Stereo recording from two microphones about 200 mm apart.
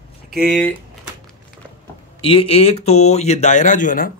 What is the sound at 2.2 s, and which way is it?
Speech, 25° left (ahead or behind).